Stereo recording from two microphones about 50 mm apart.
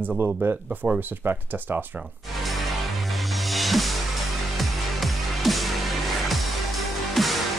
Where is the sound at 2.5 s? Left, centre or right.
Centre.